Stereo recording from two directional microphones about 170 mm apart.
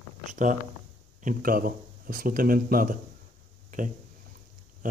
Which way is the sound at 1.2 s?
55° right (ahead or behind).